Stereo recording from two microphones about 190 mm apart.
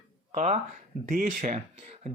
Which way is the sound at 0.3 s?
40° right (ahead or behind).